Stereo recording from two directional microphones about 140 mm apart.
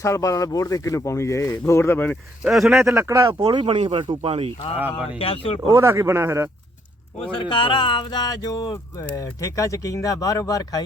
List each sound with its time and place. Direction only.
0.0 s speech: 20° left (ahead or behind)
2.4 s speech: 5° right (ahead or behind)
2.8 s speech: 20° right (ahead or behind); by 4.5 s 45° right (ahead or behind)
5.1 s speech: 40° left (ahead or behind)
5.7 s speech: 20° right (ahead or behind)
7.3 s speech: 35° left (ahead or behind)